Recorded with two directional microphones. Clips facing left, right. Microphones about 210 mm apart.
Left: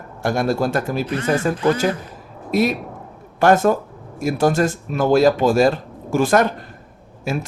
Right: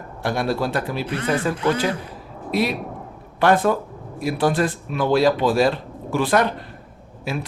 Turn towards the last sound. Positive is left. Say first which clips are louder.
# left 3 dB
turn(degrees=45)  # may be behind; listen again after turning